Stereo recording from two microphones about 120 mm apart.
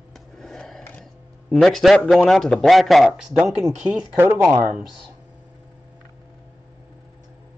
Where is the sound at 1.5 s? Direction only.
Centre (ahead or behind).